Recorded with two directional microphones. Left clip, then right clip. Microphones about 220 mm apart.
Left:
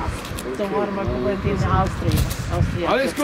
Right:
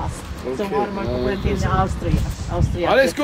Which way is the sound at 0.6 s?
Centre (ahead or behind).